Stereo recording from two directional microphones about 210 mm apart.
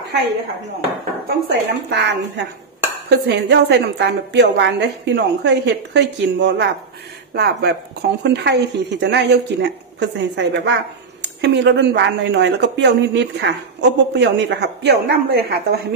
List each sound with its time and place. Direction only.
0.7 s a woman's voice: 50° right (ahead or behind)